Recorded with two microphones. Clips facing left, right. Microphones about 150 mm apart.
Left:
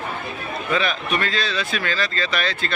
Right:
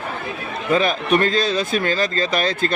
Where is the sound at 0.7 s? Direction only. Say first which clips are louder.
Right 6 dB; 45° right (ahead or behind).